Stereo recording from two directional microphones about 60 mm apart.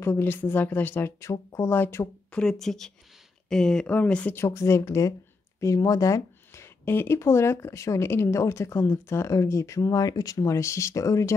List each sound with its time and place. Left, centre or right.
0.0 s speech: left
1.2 s speech: left
1.7 s speech: left
2.3 s speech: centre
3.8 s speech: left
4.4 s a woman's voice: left
5.6 s speech: left